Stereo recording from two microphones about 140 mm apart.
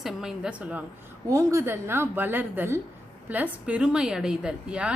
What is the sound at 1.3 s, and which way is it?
A woman's voice, 20° right (ahead or behind).